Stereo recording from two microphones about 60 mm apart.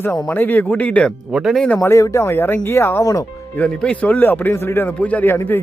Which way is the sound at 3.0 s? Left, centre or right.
Left.